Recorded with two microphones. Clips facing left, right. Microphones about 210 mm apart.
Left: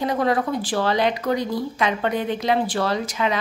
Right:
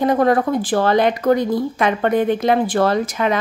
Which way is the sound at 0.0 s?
50° right (ahead or behind).